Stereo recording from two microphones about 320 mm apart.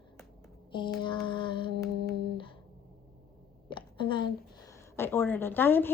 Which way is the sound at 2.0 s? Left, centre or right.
Right.